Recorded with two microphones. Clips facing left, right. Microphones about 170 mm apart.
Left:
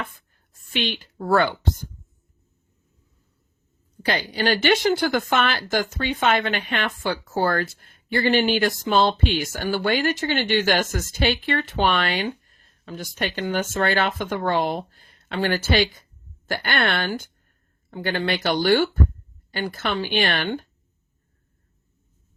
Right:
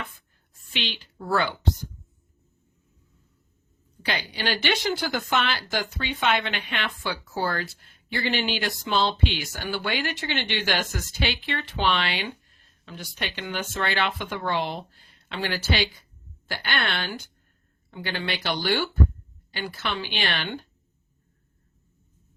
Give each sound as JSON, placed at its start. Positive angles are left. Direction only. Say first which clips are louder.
{"t": 0.7, "sound": "speech", "louder": "left 6 dB", "side_deg": 50}
{"t": 4.0, "sound": "speech", "louder": "left 6 dB", "side_deg": 45}